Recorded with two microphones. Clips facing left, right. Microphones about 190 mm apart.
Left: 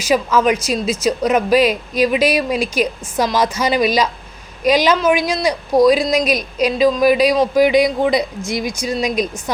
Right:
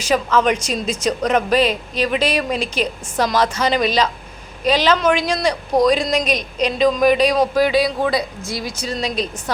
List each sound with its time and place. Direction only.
0.0 s a woman's voice: 10° left (ahead or behind)